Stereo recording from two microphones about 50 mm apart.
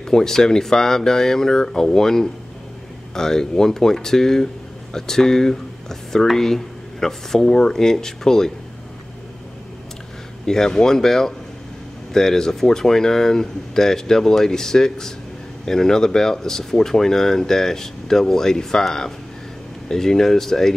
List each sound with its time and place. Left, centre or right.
0.0 s speech: centre
10.4 s speech: centre